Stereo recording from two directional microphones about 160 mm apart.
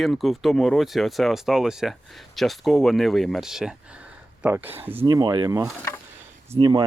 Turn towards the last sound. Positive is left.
turn(degrees=-30)  # may be behind; listen again after turning